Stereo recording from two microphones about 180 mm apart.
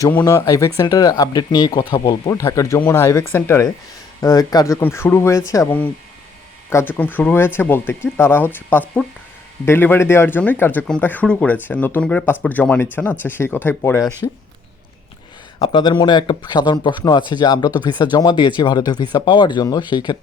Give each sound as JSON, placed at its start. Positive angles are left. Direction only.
{"t": 0.0, "sound": "speech", "side_deg": 15}
{"t": 15.5, "sound": "speech", "side_deg": 25}